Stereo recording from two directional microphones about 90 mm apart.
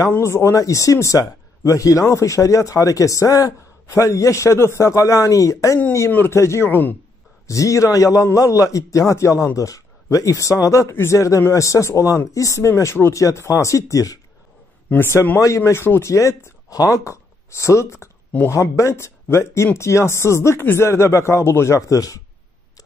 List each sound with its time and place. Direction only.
0.1 s speech: 30° left (ahead or behind)
5.9 s speech: 25° left (ahead or behind)
7.4 s speech: 35° left (ahead or behind)
14.9 s speech: 25° left (ahead or behind)